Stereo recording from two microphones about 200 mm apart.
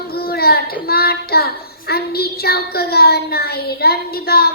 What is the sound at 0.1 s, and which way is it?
Child singing, 50° left (ahead or behind).